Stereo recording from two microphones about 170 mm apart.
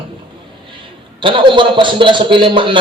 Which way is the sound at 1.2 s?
30° right (ahead or behind).